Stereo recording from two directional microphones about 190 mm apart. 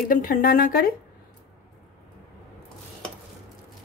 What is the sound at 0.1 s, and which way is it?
Speech, 45° left (ahead or behind).